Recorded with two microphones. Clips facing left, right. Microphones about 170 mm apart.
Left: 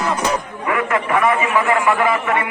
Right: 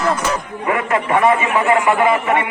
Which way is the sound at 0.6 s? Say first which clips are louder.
Right 2 dB; 25° right (ahead or behind).